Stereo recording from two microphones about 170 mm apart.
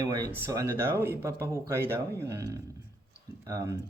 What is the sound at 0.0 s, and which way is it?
Speech, 20° right (ahead or behind).